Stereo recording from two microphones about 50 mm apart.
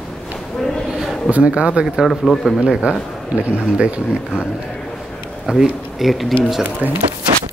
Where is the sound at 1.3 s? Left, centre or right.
Right.